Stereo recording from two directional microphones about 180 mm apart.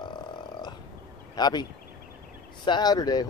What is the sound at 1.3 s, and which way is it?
Speech, 25° left (ahead or behind).